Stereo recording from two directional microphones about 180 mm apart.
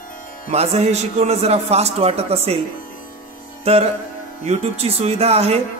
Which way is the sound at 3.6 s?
35° right (ahead or behind).